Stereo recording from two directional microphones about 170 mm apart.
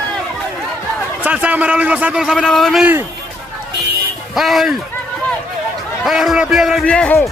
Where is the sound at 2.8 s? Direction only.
10° right (ahead or behind).